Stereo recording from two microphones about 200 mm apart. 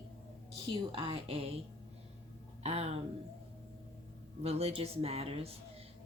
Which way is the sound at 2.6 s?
30° right (ahead or behind).